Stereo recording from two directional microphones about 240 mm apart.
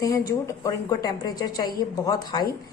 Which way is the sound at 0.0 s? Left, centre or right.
Centre.